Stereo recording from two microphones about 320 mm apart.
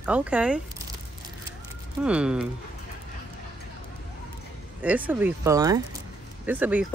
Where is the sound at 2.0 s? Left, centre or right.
Centre.